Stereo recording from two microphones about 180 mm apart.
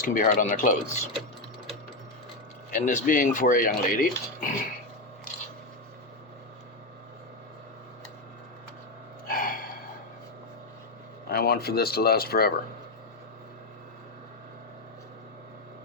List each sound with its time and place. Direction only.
0.0 s speech: 50° left (ahead or behind)
2.6 s speech: 45° left (ahead or behind)
9.2 s a sound: 50° left (ahead or behind)
11.3 s speech: 60° left (ahead or behind)